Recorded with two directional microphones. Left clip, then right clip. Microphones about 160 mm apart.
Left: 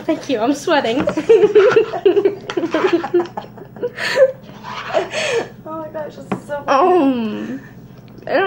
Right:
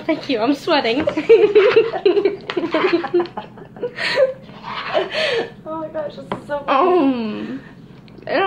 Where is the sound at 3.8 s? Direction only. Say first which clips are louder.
Left 3 dB; 5° left (ahead or behind).